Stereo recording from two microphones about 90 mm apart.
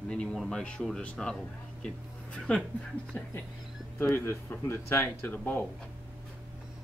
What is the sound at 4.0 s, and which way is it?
Speech, 25° left (ahead or behind).